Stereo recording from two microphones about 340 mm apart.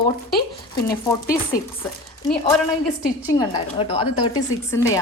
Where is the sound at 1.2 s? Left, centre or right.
Left.